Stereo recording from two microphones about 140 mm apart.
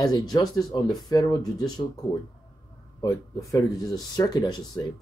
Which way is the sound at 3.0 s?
25° left (ahead or behind).